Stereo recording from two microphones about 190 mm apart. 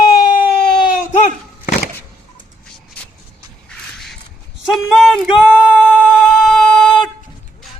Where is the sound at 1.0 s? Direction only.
40° left (ahead or behind).